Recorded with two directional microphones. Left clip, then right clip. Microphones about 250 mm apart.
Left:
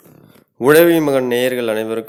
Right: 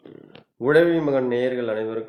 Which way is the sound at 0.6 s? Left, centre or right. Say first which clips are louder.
Left 7 dB; left.